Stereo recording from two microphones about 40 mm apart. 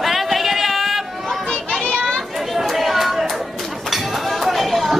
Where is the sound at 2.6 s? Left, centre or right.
Centre.